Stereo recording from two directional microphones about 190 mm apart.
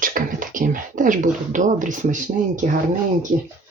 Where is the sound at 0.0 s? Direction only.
45° right (ahead or behind).